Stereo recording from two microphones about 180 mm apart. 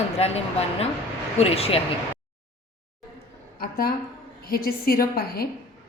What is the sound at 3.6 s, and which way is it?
A woman's voice, 55° left (ahead or behind).